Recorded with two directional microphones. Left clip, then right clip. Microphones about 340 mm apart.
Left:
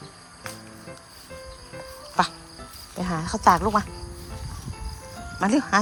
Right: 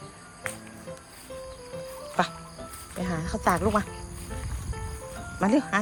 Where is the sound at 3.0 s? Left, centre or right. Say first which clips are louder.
Left 6 dB; centre.